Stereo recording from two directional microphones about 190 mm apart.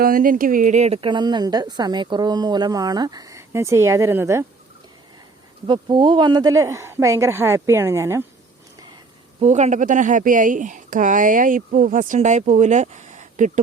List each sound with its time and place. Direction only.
0.0 s a woman's voice: 45° right (ahead or behind); by 4.4 s 15° right (ahead or behind)
5.6 s speech: 25° right (ahead or behind)
9.4 s speech: 40° right (ahead or behind)